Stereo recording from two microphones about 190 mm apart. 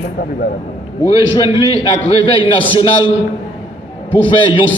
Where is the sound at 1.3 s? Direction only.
25° left (ahead or behind).